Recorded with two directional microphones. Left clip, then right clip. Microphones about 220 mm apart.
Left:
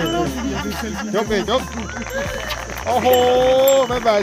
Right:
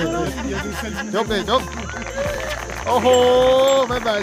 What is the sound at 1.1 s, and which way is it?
Speech, 15° right (ahead or behind).